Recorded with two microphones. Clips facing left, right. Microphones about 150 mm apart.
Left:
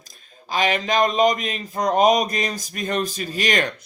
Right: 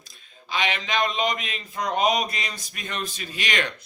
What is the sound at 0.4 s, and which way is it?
Speech, 40° left (ahead or behind).